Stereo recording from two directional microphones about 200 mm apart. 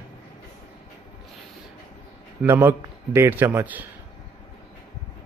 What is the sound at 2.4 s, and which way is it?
A man's voice, 10° right (ahead or behind).